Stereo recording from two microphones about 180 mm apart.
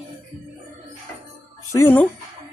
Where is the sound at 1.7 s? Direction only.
10° left (ahead or behind).